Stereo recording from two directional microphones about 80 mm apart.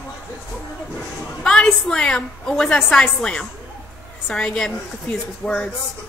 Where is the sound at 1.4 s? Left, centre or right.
Centre.